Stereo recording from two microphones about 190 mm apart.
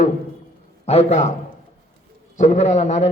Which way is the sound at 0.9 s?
35° left (ahead or behind).